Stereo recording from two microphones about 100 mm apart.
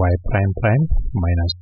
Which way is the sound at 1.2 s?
10° right (ahead or behind).